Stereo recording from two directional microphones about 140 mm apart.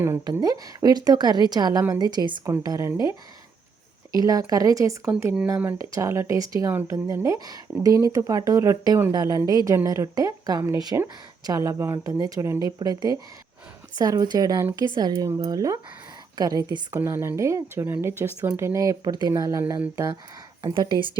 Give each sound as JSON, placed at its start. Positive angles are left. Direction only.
{"t": 0.0, "sound": "speech", "side_deg": -20}
{"t": 4.2, "sound": "a woman's voice", "side_deg": -25}